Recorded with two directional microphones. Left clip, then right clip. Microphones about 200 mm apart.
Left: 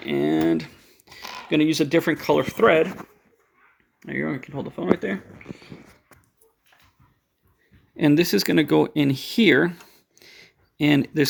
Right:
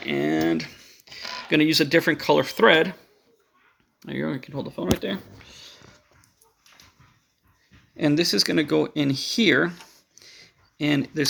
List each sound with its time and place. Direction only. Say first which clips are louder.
0.0 s typing: left 2 dB; 20° left (ahead or behind)
1.5 s speech: right 1 dB; 10° left (ahead or behind)
2.6 s speech: even; 15° right (ahead or behind)
4.0 s speech: left 2 dB; 5° left (ahead or behind)
7.9 s speech: left 2 dB; 45° left (ahead or behind)